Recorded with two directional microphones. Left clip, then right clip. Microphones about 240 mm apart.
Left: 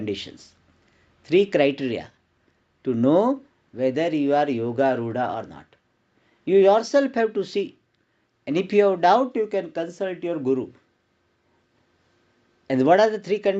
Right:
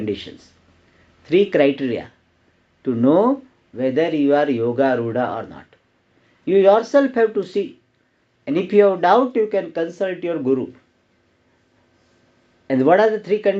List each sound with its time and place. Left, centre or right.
0.0 s speech: left
12.6 s speech: left